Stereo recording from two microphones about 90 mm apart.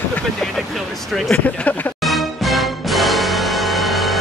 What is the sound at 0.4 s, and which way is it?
Vehicle, centre (ahead or behind).